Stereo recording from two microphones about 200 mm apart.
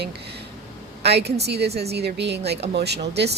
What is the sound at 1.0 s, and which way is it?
Speech, 55° right (ahead or behind).